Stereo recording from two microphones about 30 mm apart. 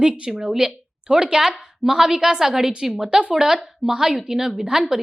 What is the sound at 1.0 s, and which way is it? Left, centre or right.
A woman's voice, right.